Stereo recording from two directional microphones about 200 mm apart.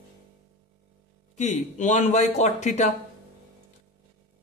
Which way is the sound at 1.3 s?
35° left (ahead or behind).